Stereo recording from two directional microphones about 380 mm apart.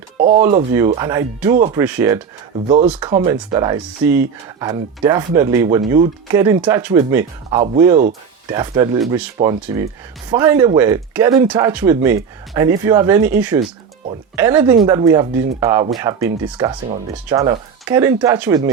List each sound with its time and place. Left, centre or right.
0.2 s speech: centre
1.5 s speech: centre
1.8 s speech: centre